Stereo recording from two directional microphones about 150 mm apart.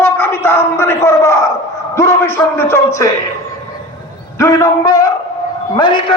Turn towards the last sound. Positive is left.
turn(degrees=30)  # may be behind; listen again after turning